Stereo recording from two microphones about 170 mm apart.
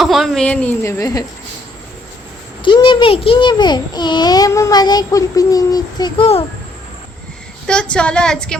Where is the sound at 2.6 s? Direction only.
30° left (ahead or behind).